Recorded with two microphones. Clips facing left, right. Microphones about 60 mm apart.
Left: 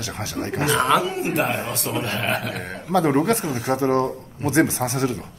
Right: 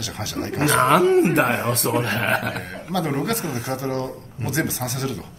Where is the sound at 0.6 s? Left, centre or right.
Right.